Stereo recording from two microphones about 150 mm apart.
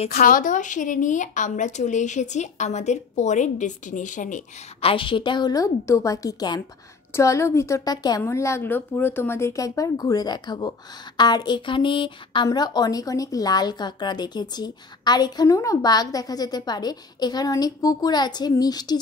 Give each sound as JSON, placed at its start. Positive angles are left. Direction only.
{"t": 0.1, "sound": "speech", "side_deg": 70}
{"t": 4.8, "sound": "a woman's voice", "side_deg": 35}